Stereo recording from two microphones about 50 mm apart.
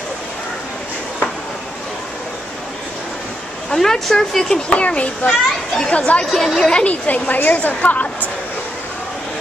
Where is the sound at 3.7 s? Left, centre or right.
Centre.